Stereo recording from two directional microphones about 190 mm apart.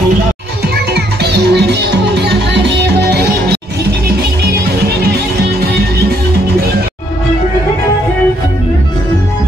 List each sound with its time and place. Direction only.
0.9 s music: 60° right (ahead or behind)